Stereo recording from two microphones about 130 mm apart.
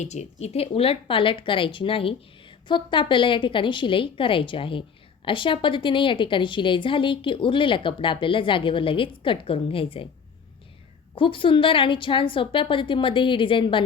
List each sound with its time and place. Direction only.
0.0 s speech: 60° left (ahead or behind); by 10.1 s 45° left (ahead or behind)
11.1 s speech: 40° left (ahead or behind)